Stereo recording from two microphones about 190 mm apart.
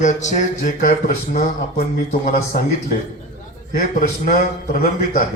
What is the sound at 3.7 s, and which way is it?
Speech, 45° left (ahead or behind).